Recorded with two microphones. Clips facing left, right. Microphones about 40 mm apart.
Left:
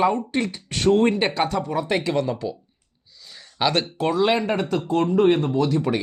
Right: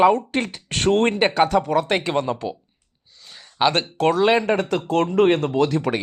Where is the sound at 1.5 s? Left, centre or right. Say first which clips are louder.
Right 4 dB; right.